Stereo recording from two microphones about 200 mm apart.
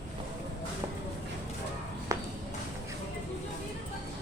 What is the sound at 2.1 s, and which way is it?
Walk, 15° right (ahead or behind).